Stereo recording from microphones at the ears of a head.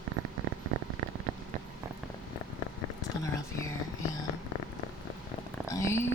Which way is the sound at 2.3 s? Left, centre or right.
Left.